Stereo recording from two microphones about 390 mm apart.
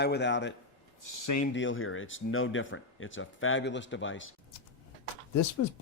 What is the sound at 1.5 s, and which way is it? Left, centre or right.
A man's voice, left.